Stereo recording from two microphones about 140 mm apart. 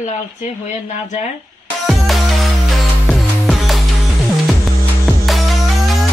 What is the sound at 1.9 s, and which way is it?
Music, centre (ahead or behind).